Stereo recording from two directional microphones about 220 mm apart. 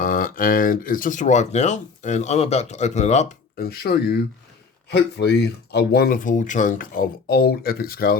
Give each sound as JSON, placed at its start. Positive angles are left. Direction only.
{"t": 0.0, "sound": "speech", "side_deg": 40}